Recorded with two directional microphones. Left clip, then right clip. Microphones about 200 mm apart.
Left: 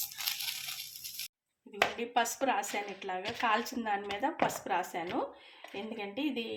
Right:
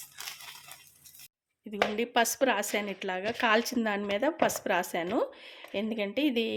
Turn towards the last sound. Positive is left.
turn(degrees=-60)  # may be behind; listen again after turning